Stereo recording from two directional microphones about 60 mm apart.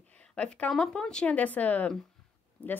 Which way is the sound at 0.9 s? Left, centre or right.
Centre.